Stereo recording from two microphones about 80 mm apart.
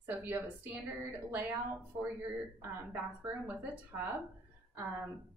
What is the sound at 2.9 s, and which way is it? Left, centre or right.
Speech, right.